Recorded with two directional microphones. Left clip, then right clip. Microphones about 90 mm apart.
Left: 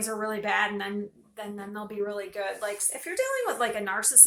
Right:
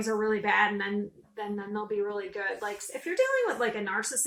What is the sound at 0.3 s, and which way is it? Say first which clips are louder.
Speech: right 1 dB; 45° left (ahead or behind).